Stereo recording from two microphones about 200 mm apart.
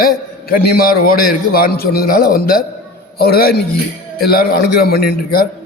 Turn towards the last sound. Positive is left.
turn(degrees=55)  # may be behind; listen again after turning